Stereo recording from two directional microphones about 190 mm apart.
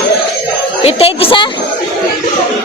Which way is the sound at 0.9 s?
30° left (ahead or behind).